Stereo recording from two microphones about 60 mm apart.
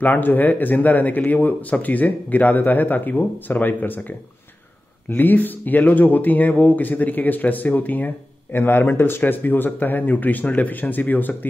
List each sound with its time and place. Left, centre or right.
0.0 s speech: left
5.1 s speech: left
8.5 s speech: left